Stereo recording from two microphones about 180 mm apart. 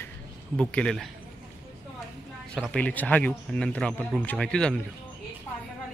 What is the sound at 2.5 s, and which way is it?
Speech, 5° left (ahead or behind).